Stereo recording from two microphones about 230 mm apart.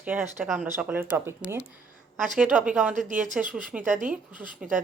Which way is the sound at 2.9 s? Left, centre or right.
Right.